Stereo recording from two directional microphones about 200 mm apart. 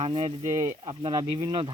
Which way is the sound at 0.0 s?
25° right (ahead or behind).